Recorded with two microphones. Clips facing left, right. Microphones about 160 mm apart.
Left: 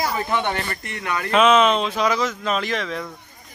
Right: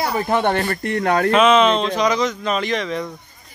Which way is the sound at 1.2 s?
Centre (ahead or behind).